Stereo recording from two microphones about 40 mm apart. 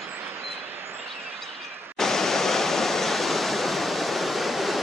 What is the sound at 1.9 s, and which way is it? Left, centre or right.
Waterfall, centre.